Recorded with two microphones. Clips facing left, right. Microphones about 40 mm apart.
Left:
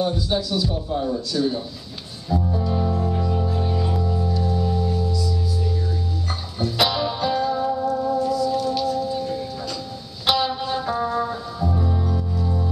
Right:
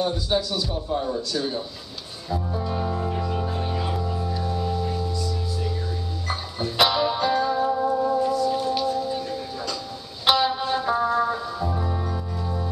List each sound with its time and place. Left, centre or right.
0.0 s a man's voice: centre
2.2 s music: centre
6.2 s music: centre
10.2 s music: centre
12.0 s music: right